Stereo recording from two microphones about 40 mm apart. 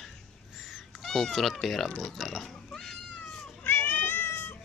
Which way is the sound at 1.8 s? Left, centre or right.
Centre.